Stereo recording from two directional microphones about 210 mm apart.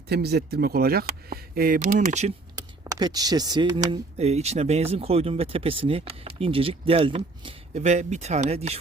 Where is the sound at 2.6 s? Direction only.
15° right (ahead or behind).